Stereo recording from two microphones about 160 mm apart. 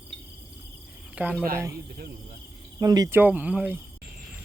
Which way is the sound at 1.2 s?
10° right (ahead or behind).